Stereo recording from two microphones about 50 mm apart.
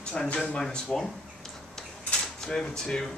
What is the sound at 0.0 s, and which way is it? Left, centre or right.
Speech, centre.